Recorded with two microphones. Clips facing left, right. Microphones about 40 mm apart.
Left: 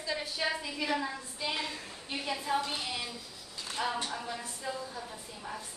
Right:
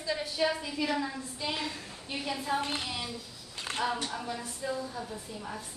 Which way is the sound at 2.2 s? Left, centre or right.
Centre.